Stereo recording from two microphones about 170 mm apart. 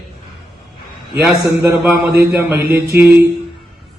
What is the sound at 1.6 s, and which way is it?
A man's voice, 10° right (ahead or behind).